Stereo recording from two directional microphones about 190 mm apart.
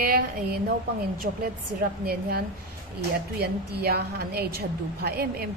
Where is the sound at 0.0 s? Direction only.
50° right (ahead or behind).